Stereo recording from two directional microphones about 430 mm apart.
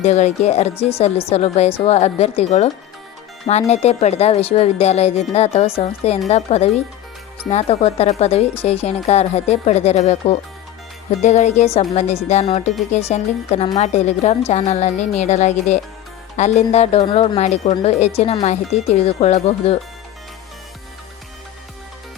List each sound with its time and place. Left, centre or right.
0.0 s speech: centre